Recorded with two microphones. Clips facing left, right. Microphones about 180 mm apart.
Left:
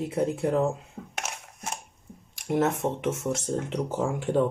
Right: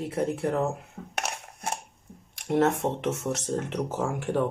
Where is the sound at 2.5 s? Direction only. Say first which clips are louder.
Right 2 dB; 65° right (ahead or behind).